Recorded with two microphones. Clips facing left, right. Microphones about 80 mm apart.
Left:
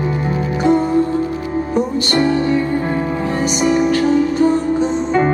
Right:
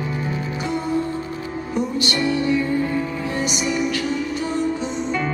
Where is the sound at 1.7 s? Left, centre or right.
Left.